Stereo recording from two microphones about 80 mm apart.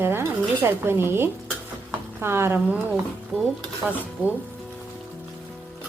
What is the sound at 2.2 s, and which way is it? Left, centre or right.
Speech, right.